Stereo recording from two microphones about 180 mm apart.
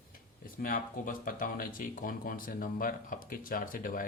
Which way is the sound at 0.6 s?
50° left (ahead or behind).